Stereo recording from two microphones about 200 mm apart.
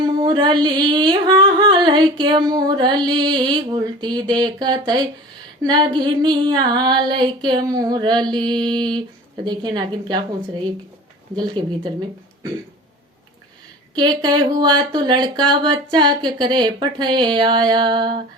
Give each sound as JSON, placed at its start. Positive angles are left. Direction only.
{"t": 0.0, "sound": "singing", "side_deg": -20}
{"t": 3.1, "sound": "speech", "side_deg": -20}
{"t": 13.9, "sound": "speech", "side_deg": -20}